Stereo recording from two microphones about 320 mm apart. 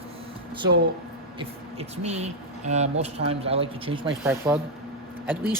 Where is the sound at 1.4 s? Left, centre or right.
Centre.